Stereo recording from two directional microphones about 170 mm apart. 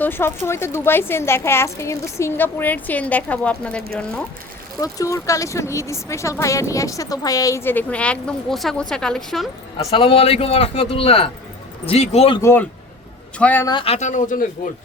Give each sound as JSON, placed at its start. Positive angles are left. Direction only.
{"t": 0.0, "sound": "speech", "side_deg": 15}
{"t": 4.8, "sound": "speech", "side_deg": 20}
{"t": 9.7, "sound": "a man's voice", "side_deg": 30}
{"t": 12.4, "sound": "speech", "side_deg": 15}
{"t": 13.7, "sound": "speech", "side_deg": 30}